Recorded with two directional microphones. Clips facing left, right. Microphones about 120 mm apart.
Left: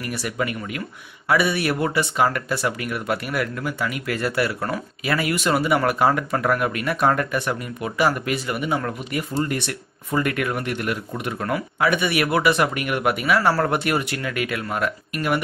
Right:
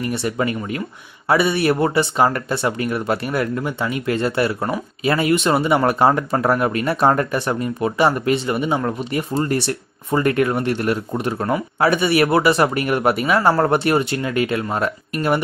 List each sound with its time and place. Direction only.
0.0 s speech: 25° right (ahead or behind)